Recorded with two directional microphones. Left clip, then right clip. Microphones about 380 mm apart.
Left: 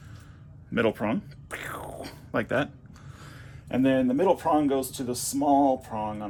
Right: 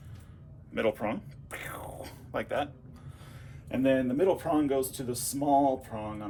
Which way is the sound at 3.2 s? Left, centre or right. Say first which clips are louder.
Left 5 dB; left.